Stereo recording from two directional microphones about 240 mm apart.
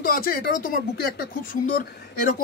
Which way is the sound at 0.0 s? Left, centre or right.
Left.